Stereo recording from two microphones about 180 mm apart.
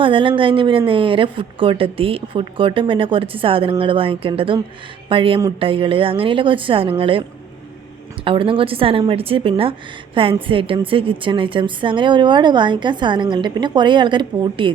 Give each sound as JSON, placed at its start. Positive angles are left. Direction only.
{"t": 0.0, "sound": "a woman's voice", "side_deg": -30}